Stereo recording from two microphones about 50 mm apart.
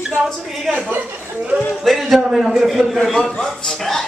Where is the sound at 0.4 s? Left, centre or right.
Centre.